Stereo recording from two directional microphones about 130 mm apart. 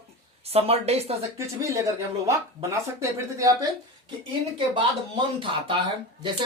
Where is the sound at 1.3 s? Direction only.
20° right (ahead or behind).